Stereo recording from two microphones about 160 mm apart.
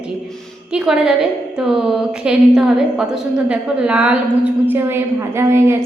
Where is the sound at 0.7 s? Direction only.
5° right (ahead or behind).